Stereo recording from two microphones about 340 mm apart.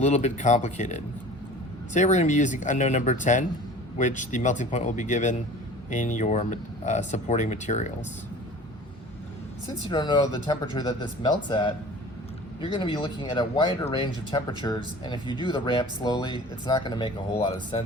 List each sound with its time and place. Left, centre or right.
0.0 s speech: centre
9.9 s speech: centre
12.7 s speech: centre